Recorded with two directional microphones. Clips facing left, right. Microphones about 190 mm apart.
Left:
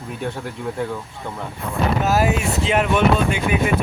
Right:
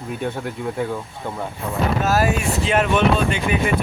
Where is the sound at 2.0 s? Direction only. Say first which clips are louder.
Left 1 dB; 15° left (ahead or behind).